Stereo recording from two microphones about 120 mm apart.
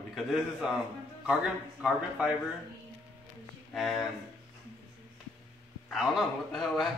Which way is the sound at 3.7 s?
Centre (ahead or behind).